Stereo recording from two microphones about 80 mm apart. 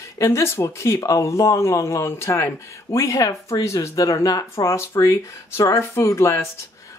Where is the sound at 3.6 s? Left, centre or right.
Left.